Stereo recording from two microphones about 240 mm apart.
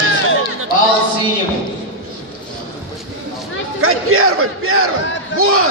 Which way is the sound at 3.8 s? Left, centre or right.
Right.